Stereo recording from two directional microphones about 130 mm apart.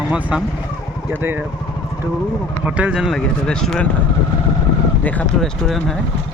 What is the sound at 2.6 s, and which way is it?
Speech, 10° right (ahead or behind).